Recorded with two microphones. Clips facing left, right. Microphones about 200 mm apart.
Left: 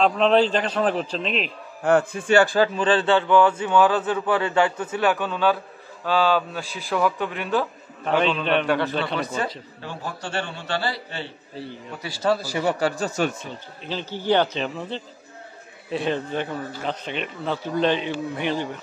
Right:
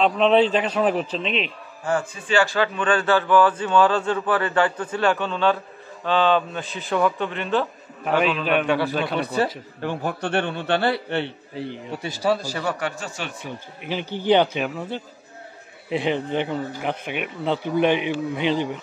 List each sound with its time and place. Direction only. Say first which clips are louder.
0.0 s a man's voice: right 1 dB; centre (ahead or behind)
1.8 s a man's voice: left 5 dB; 60° left (ahead or behind)
2.5 s speech: left 2 dB; 35° left (ahead or behind)
3.5 s a man's voice: even; 10° left (ahead or behind)
8.0 s a man's voice: even; 5° right (ahead or behind)
9.8 s a man's voice: right 10 dB; 60° right (ahead or behind)
11.5 s a man's voice: right 3 dB; 20° right (ahead or behind)
12.3 s a man's voice: even; 5° left (ahead or behind)
12.7 s speech: left 6 dB; 35° left (ahead or behind)
13.5 s speech: right 2 dB; 15° right (ahead or behind)